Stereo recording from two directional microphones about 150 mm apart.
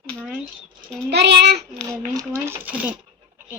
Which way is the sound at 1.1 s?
90° right.